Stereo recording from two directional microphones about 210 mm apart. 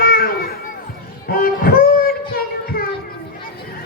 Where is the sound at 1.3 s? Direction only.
45° left (ahead or behind).